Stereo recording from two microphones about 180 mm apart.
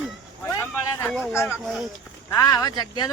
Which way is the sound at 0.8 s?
15° left (ahead or behind).